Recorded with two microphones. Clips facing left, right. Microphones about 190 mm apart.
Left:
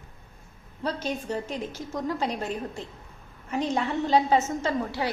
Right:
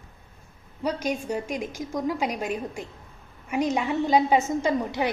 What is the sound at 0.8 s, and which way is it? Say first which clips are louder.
A woman's voice: right 3 dB; 10° right (ahead or behind).